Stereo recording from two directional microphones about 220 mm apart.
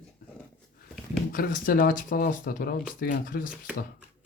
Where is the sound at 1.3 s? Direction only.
40° left (ahead or behind).